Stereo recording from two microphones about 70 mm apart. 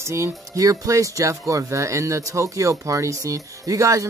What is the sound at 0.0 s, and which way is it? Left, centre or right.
Speech, right.